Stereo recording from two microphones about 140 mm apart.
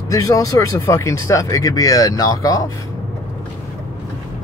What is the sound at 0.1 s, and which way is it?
Speech, 25° left (ahead or behind).